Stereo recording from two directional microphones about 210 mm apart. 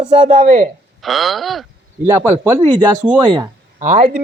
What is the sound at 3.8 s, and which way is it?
Speech, 35° right (ahead or behind).